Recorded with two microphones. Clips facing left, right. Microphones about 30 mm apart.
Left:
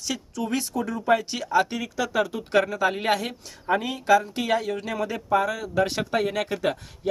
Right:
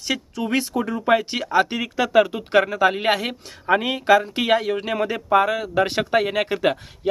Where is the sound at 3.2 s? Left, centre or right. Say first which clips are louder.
Right 4 dB; right.